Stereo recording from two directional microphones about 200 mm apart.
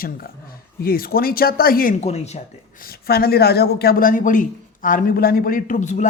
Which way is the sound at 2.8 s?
50° left (ahead or behind).